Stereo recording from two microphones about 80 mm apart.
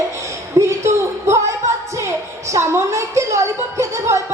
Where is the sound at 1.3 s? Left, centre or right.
Right.